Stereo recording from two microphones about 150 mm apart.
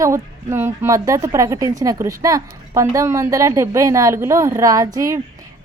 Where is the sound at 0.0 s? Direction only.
15° right (ahead or behind).